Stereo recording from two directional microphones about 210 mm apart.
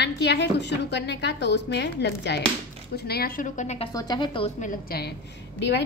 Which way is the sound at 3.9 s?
20° left (ahead or behind).